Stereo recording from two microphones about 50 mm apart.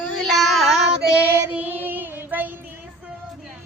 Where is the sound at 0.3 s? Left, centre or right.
Centre.